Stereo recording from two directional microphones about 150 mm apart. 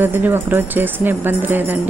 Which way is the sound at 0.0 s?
15° right (ahead or behind).